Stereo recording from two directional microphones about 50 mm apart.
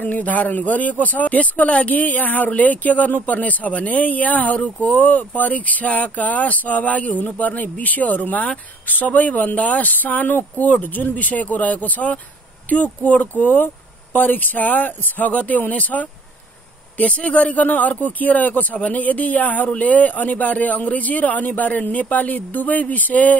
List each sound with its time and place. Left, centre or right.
0.0 s speech: left